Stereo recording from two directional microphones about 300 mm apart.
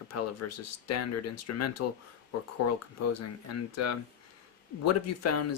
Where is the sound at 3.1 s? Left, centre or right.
Left.